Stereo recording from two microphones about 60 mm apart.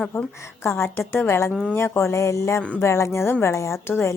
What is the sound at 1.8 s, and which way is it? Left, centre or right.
A woman's voice, left.